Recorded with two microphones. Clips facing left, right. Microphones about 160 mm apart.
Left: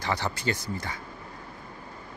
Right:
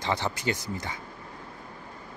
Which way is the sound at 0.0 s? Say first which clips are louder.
Right 1 dB; 20° right (ahead or behind).